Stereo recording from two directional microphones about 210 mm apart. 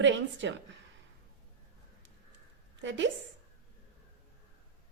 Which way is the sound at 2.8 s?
60° right (ahead or behind).